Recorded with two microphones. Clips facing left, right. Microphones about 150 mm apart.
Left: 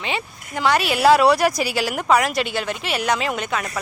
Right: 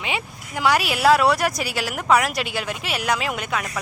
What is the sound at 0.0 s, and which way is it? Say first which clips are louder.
A woman's voice: left 1 dB; 10° right (ahead or behind).